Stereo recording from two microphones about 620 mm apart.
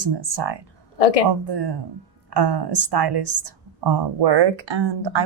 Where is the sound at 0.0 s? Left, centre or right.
Right.